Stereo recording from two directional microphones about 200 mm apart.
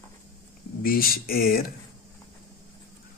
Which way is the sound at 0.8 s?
45° left (ahead or behind).